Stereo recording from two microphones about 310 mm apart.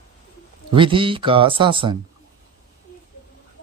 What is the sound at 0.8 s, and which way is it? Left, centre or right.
Speech, centre.